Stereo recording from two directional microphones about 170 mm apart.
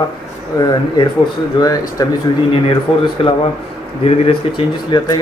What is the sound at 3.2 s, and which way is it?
Speech, 35° left (ahead or behind).